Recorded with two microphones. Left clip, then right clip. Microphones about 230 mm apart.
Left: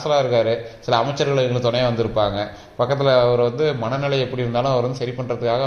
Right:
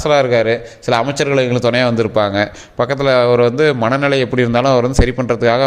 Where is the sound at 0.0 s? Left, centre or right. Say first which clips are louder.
Right 5 dB; right.